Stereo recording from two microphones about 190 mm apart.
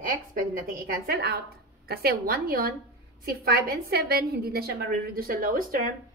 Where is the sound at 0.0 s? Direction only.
45° right (ahead or behind).